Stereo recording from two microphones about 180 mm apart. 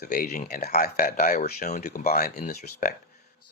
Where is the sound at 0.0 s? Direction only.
60° left (ahead or behind).